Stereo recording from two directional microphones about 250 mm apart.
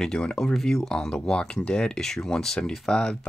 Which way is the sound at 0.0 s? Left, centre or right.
Centre.